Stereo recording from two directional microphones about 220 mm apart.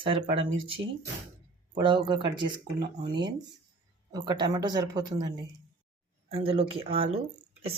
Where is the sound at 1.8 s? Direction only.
20° right (ahead or behind).